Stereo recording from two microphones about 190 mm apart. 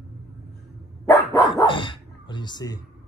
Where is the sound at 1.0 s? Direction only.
20° left (ahead or behind).